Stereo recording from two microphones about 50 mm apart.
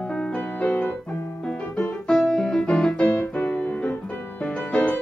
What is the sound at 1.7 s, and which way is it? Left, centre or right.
Piano, left.